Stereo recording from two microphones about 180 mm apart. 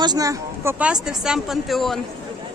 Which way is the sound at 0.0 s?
20° right (ahead or behind).